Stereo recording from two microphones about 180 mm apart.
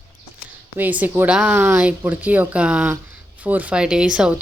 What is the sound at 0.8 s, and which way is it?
A woman's voice, 10° right (ahead or behind).